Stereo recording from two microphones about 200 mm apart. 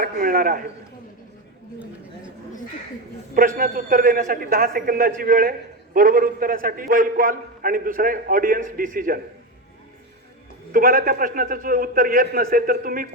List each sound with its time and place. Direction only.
0.0 s a man's voice: 45° right (ahead or behind)
3.3 s a man's voice: 45° right (ahead or behind)
10.7 s a man's voice: 45° right (ahead or behind)